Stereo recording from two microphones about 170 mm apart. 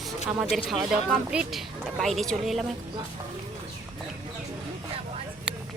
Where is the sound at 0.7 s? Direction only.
Centre (ahead or behind).